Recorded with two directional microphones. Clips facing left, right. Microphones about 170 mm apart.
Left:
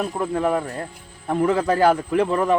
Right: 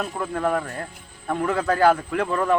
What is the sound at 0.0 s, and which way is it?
A man's voice, 20° left (ahead or behind).